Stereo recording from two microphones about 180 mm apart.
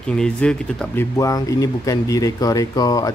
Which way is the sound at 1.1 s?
20° left (ahead or behind).